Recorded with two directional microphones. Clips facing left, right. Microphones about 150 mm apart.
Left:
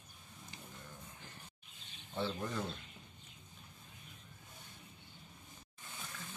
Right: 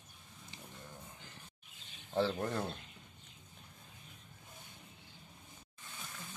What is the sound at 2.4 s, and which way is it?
Speech, 50° right (ahead or behind).